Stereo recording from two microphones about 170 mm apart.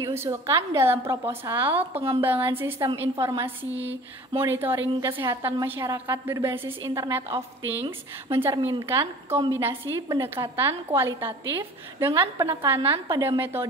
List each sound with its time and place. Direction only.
0.0 s a woman's voice: 15° right (ahead or behind)